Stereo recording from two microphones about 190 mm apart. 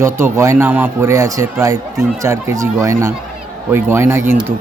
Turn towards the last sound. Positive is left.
turn(degrees=-10)  # may be behind; listen again after turning